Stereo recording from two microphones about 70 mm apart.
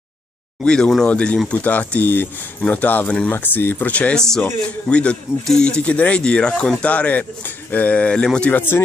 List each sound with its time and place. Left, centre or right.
0.7 s speech: centre
4.1 s speech: centre
4.4 s speech: centre